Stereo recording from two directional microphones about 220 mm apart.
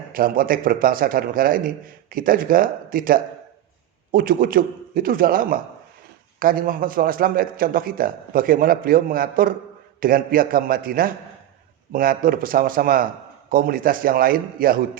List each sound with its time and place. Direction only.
0.1 s a man's voice: 40° right (ahead or behind)